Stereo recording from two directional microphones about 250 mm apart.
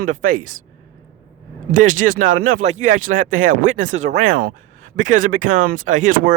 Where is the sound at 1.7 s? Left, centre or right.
Right.